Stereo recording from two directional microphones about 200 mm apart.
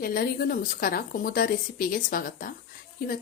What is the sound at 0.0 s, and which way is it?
A woman's voice, 45° left (ahead or behind).